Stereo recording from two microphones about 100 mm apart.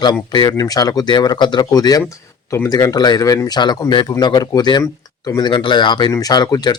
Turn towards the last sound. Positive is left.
turn(degrees=45)  # may be behind; listen again after turning